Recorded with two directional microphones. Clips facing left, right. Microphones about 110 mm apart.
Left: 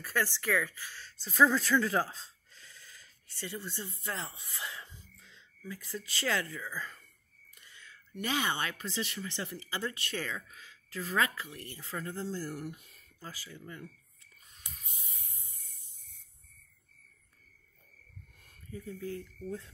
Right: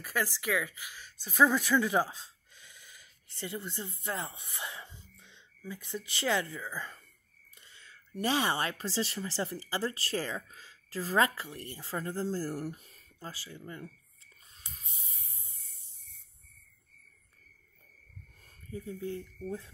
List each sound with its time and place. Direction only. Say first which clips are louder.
0.0 s speech: even; 15° right (ahead or behind); by 15.5 s 30° right (ahead or behind)
18.7 s speech: right 2 dB; 25° right (ahead or behind)